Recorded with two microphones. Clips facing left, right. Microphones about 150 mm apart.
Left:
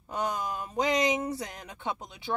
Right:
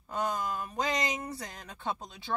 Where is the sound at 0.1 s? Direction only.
20° left (ahead or behind).